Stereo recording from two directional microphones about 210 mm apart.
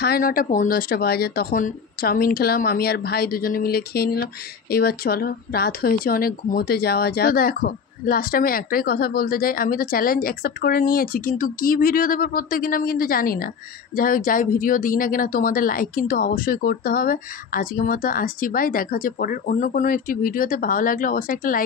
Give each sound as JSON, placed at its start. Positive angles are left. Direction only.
{"t": 0.0, "sound": "speech", "side_deg": 45}